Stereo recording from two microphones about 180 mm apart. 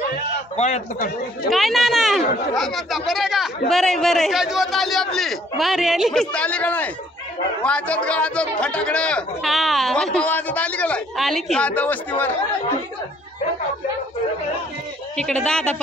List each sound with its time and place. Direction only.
0.6 s speech: 40° left (ahead or behind)
1.5 s a man's voice: centre (ahead or behind)
15.1 s speech: 5° left (ahead or behind)